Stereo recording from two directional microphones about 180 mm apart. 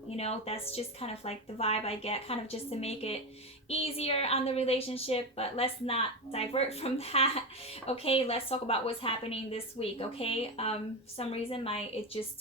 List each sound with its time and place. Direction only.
0.2 s speech: 35° left (ahead or behind)